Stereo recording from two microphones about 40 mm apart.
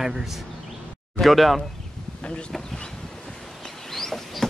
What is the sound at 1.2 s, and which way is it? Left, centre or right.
Speech, centre.